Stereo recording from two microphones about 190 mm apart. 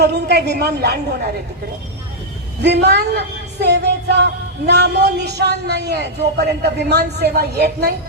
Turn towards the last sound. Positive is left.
turn(degrees=-60)  # may be behind; listen again after turning